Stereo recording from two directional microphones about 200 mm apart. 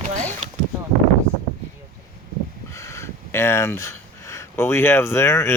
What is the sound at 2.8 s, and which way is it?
Speech, 15° left (ahead or behind).